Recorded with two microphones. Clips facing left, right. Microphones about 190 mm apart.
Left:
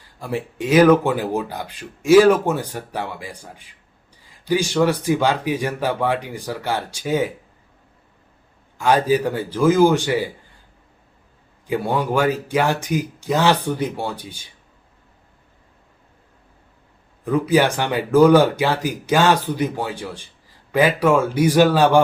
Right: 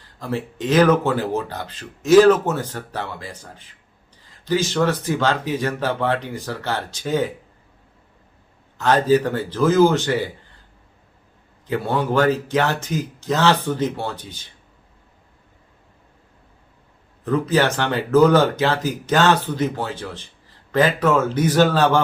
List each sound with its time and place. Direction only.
0.2 s speech: 10° left (ahead or behind)
8.8 s speech: 10° left (ahead or behind)
11.7 s speech: 10° left (ahead or behind)
17.2 s speech: 10° left (ahead or behind)